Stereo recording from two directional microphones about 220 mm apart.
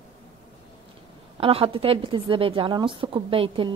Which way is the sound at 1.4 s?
25° right (ahead or behind).